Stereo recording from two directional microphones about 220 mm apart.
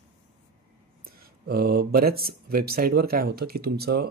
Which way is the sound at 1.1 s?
45° right (ahead or behind).